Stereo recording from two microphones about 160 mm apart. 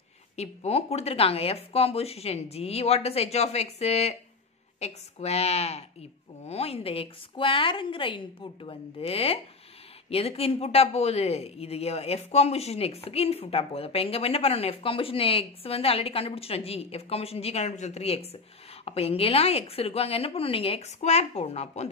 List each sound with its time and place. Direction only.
0.4 s speech: 40° left (ahead or behind)